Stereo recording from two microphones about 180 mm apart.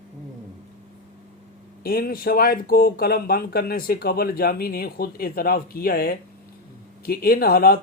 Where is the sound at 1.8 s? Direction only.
55° left (ahead or behind).